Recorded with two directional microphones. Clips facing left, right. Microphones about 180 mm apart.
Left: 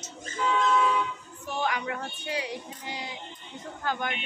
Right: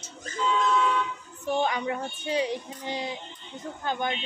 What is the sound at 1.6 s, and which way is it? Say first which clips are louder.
Speech: right 2 dB; 25° right (ahead or behind).